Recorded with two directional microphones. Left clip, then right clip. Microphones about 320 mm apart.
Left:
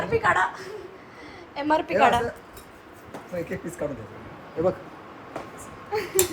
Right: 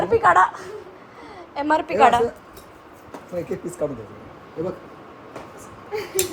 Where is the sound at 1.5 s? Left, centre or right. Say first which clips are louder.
Right 2 dB; centre.